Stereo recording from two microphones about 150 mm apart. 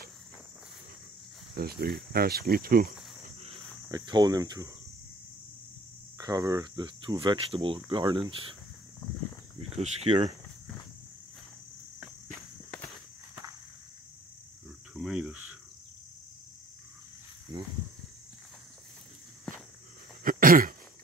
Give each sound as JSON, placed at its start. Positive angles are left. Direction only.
{"t": 1.6, "sound": "speech", "side_deg": -90}
{"t": 3.9, "sound": "speech", "side_deg": -30}
{"t": 6.1, "sound": "speech", "side_deg": -20}
{"t": 9.6, "sound": "speech", "side_deg": -40}
{"t": 12.0, "sound": "walk", "side_deg": 0}
{"t": 15.0, "sound": "cricket", "side_deg": -5}
{"t": 17.5, "sound": "a sound", "side_deg": -25}
{"t": 19.5, "sound": "walk", "side_deg": 5}
{"t": 20.2, "sound": "throat clearing", "side_deg": -70}